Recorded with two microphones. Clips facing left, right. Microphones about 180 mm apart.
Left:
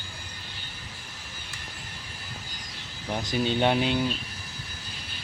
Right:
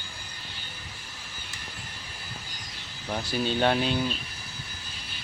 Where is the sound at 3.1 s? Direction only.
15° left (ahead or behind).